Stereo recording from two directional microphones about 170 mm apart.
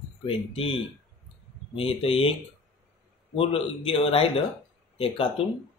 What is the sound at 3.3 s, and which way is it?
Speech, 35° left (ahead or behind).